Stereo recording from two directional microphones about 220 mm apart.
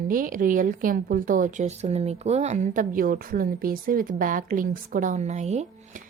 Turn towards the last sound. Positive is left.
turn(degrees=-30)  # may be behind; listen again after turning